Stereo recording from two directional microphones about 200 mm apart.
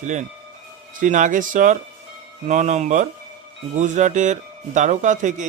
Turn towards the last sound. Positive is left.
turn(degrees=-40)  # may be behind; listen again after turning